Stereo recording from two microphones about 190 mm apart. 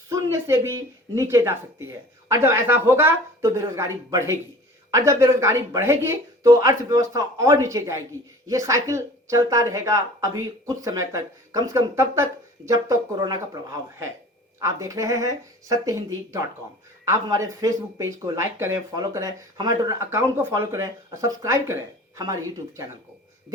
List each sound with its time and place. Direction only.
0.1 s speech: 15° right (ahead or behind)